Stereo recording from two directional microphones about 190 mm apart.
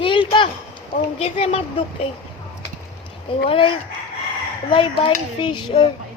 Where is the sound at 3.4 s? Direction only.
25° left (ahead or behind).